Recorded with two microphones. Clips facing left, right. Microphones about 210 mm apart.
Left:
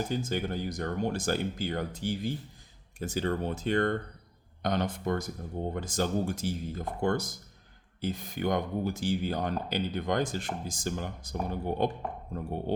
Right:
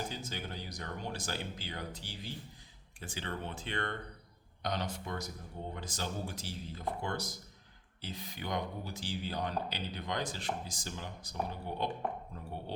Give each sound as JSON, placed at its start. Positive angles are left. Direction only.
{"t": 0.1, "sound": "speech", "side_deg": 50}
{"t": 4.6, "sound": "speech", "side_deg": 55}